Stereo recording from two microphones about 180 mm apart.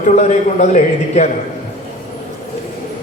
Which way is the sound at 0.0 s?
40° left (ahead or behind).